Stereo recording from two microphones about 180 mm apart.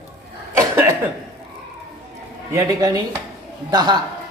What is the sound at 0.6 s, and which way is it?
Cough, 15° right (ahead or behind).